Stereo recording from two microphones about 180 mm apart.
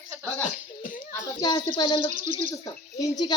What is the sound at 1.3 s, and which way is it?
A child's voice, 20° left (ahead or behind).